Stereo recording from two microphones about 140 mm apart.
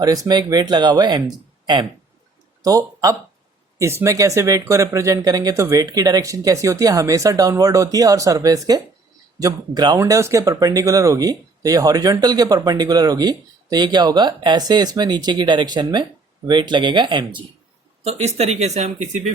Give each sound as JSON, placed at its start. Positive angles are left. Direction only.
{"t": 0.0, "sound": "speech", "side_deg": -25}
{"t": 18.0, "sound": "speech", "side_deg": -50}